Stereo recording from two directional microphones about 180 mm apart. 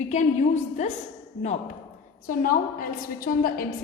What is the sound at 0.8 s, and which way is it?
Speech, 40° left (ahead or behind).